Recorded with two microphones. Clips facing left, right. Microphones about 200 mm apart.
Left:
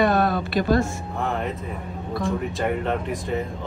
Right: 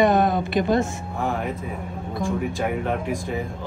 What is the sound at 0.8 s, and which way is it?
Speech, centre (ahead or behind).